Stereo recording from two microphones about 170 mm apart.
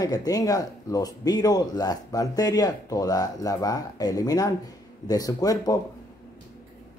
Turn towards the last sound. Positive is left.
turn(degrees=20)  # may be behind; listen again after turning